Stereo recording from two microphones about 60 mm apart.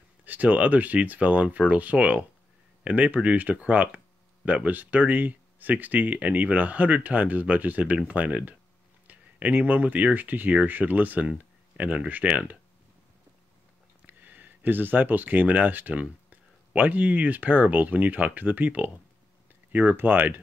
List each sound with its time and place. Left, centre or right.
0.2 s speech: right
14.0 s speech: right